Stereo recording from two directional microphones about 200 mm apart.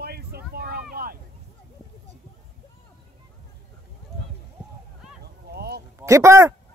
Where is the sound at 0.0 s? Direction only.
50° right (ahead or behind).